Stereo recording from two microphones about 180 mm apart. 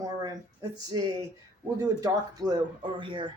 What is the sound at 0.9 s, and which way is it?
Speech, 25° right (ahead or behind).